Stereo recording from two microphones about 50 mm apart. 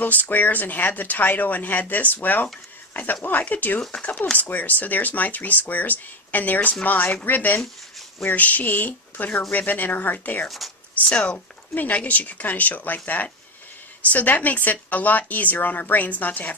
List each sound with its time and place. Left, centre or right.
0.0 s speech: left
11.1 s speech: left